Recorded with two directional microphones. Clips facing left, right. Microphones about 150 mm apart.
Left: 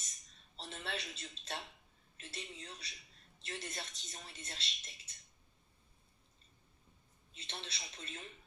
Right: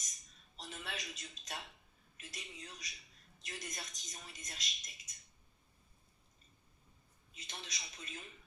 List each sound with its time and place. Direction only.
0.6 s speech: 30° left (ahead or behind)
7.3 s speech: 30° left (ahead or behind)